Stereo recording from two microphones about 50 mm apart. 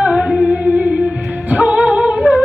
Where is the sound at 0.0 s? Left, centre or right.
Right.